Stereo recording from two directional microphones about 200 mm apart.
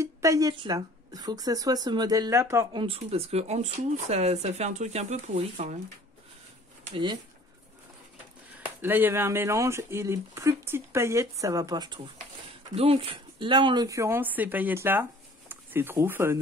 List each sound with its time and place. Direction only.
0.0 s speech: 15° right (ahead or behind)
2.8 s speech: 30° right (ahead or behind)
6.9 s speech: 25° right (ahead or behind)
8.8 s speech: 10° right (ahead or behind)